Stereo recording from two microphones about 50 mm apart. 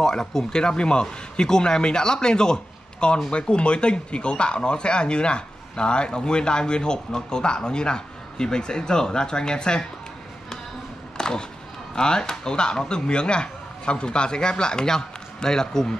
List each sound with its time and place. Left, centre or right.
0.0 s speech: centre
11.1 s a sound: centre
11.9 s speech: centre